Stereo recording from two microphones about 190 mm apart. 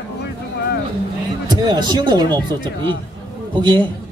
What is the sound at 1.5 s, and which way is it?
Speech, 20° right (ahead or behind).